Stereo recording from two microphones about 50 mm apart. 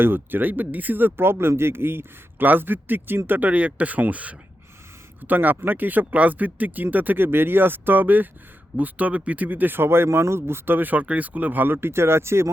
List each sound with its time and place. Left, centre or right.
0.0 s speech: right